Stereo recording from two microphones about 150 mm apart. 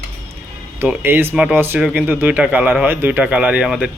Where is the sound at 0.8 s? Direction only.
15° right (ahead or behind).